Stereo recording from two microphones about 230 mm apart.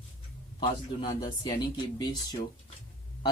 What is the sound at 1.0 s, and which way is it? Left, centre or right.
Speech, centre.